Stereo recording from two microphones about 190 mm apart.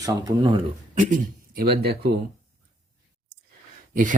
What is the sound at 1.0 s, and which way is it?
Speech, 45° right (ahead or behind).